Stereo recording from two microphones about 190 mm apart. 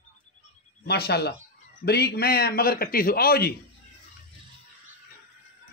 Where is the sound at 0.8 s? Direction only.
55° left (ahead or behind).